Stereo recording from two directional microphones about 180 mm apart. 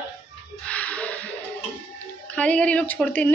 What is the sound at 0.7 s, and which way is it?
Music, 5° left (ahead or behind).